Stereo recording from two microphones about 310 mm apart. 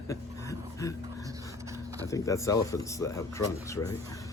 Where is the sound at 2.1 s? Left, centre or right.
Centre.